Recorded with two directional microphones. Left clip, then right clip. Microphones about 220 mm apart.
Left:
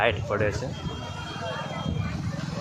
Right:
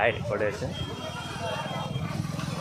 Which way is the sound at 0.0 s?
10° left (ahead or behind).